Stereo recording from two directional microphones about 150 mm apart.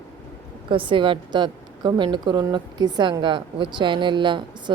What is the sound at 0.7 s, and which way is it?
A woman's voice, 35° right (ahead or behind).